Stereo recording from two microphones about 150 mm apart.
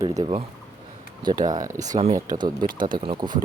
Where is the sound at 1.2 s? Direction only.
30° right (ahead or behind).